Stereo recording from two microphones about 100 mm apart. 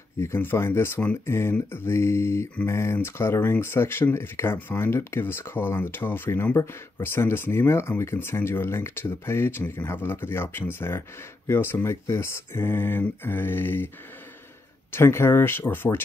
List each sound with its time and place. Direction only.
0.2 s speech: 25° left (ahead or behind)
14.9 s speech: 25° left (ahead or behind)